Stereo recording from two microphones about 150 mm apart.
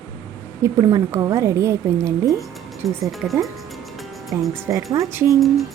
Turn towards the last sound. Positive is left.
turn(degrees=0)  # may be behind; listen again after turning